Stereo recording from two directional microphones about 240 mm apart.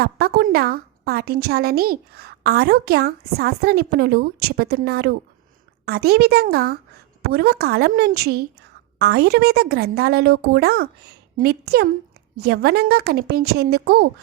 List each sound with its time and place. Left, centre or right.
0.0 s a woman's voice: right